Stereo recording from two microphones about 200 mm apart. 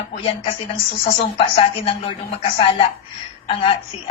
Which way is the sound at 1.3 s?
30° left (ahead or behind).